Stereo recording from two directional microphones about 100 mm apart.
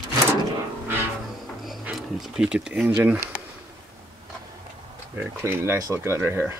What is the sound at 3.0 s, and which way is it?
Speech, 25° right (ahead or behind).